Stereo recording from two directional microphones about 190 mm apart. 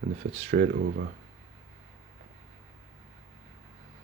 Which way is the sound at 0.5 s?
50° right (ahead or behind).